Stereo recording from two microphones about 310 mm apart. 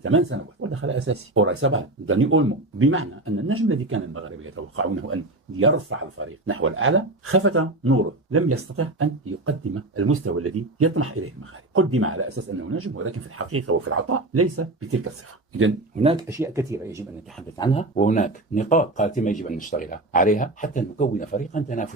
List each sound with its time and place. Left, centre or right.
0.0 s speech: right
16.0 s speech: centre
17.6 s speech: centre